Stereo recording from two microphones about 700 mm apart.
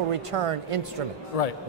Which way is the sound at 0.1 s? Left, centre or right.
Right.